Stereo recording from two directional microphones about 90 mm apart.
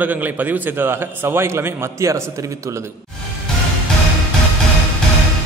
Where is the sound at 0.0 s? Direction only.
20° right (ahead or behind).